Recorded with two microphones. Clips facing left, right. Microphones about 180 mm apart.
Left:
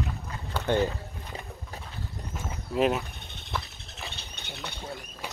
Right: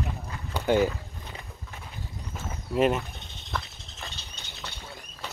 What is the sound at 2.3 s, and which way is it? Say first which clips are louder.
Pigeon: right 2 dB; centre (ahead or behind).